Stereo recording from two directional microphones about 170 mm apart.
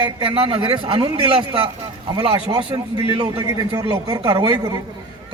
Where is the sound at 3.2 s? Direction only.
20° right (ahead or behind).